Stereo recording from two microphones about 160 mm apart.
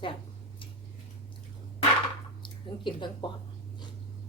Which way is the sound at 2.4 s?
30° left (ahead or behind).